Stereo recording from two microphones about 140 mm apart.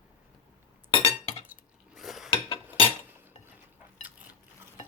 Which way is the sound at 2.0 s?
Centre (ahead or behind).